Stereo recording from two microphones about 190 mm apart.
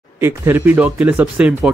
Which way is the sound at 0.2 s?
10° right (ahead or behind).